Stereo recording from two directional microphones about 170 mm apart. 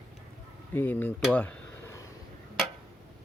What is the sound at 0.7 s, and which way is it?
Speech, 10° left (ahead or behind).